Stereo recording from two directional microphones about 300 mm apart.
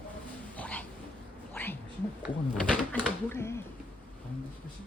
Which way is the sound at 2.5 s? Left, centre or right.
Centre.